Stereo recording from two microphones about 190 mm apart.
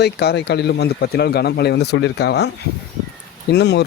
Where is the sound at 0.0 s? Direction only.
60° left (ahead or behind).